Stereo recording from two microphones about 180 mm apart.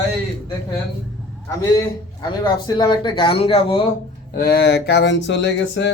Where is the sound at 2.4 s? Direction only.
25° left (ahead or behind).